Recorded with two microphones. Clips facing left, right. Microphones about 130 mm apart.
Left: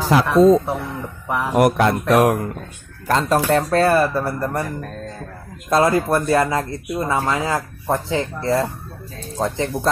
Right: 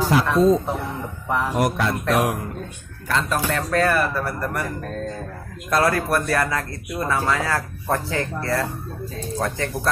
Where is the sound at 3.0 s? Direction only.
35° left (ahead or behind).